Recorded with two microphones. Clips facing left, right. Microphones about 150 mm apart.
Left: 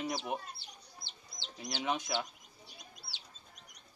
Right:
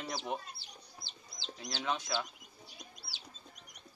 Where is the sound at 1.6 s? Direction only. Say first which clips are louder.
Left 2 dB; 15° left (ahead or behind).